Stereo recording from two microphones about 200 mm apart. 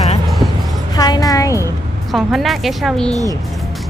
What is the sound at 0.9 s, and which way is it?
Speech, 20° left (ahead or behind).